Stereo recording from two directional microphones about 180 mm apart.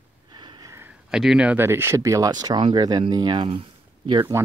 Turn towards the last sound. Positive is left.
turn(degrees=-20)  # may be behind; listen again after turning